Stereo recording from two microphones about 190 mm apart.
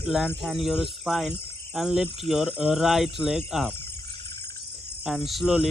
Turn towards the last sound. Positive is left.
turn(degrees=0)  # may be behind; listen again after turning